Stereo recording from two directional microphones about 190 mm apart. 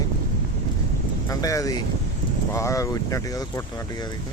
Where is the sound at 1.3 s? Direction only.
20° left (ahead or behind).